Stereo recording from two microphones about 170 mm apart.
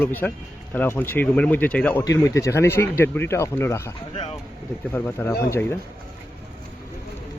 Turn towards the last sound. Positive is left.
turn(degrees=15)  # may be behind; listen again after turning